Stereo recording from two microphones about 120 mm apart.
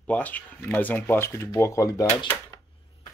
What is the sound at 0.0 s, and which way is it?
Speech, 15° left (ahead or behind).